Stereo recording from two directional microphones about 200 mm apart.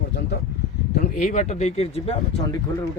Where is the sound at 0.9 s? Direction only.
40° left (ahead or behind).